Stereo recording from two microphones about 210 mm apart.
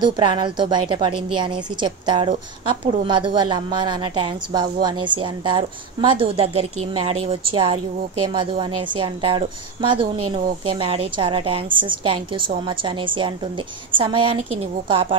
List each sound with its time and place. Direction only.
0.0 s a woman's voice: 20° right (ahead or behind)